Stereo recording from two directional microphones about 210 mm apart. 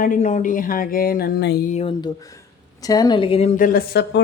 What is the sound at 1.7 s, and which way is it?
A woman's voice, 25° left (ahead or behind).